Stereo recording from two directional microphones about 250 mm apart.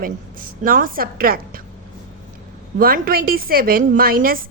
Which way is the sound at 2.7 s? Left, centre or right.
Right.